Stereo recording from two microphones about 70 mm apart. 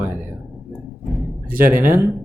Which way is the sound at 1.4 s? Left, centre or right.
Right.